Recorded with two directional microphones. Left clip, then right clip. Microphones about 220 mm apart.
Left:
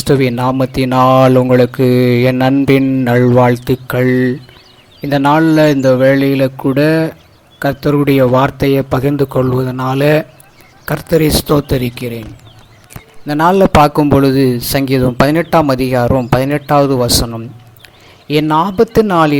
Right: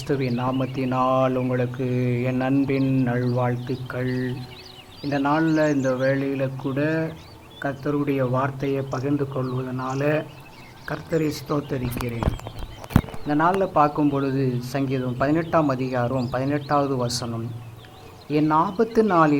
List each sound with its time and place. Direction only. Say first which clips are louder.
0.0 s a man's voice: left 13 dB; 50° left (ahead or behind)
7.6 s a man's voice: left 12 dB; 40° left (ahead or behind)
8.5 s a man's voice: left 13 dB; 55° left (ahead or behind)
13.2 s speech: left 12 dB; 35° left (ahead or behind)